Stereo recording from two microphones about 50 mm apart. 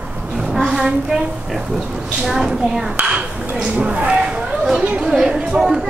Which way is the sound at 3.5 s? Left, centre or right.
Centre.